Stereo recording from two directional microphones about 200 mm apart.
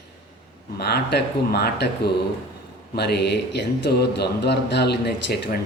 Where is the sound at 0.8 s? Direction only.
55° left (ahead or behind).